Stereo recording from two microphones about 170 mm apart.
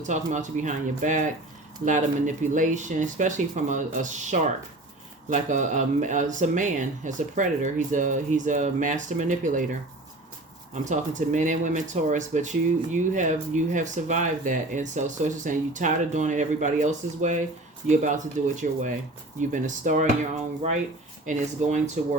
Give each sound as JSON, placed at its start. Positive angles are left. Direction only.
{"t": 0.1, "sound": "speech", "side_deg": -45}
{"t": 10.8, "sound": "speech", "side_deg": -45}
{"t": 21.2, "sound": "speech", "side_deg": -45}